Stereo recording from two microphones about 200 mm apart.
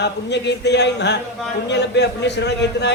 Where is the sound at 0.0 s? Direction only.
60° left (ahead or behind).